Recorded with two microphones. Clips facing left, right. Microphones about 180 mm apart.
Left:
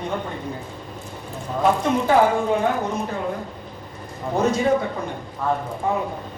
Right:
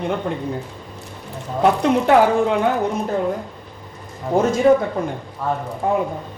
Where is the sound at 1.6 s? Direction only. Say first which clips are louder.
Right 3 dB; 70° right (ahead or behind).